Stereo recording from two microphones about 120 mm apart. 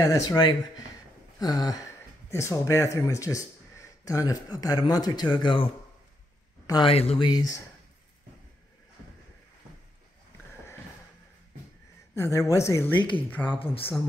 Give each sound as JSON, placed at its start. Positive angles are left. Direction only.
{"t": 0.0, "sound": "speech", "side_deg": 30}
{"t": 1.4, "sound": "a sound", "side_deg": 35}
{"t": 2.3, "sound": "speech", "side_deg": 25}
{"t": 6.9, "sound": "speech", "side_deg": 55}
{"t": 7.2, "sound": "a sound", "side_deg": 35}
{"t": 12.2, "sound": "speech", "side_deg": 30}
{"t": 13.5, "sound": "speech", "side_deg": 50}